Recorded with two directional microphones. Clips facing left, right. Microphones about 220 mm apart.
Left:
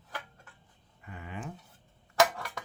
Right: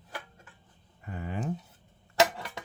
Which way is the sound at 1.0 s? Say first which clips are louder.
Right 6 dB; 35° right (ahead or behind).